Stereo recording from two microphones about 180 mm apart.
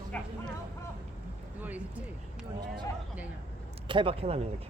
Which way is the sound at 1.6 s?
10° right (ahead or behind).